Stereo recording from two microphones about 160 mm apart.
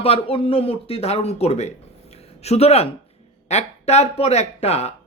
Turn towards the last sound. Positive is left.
turn(degrees=40)  # may be behind; listen again after turning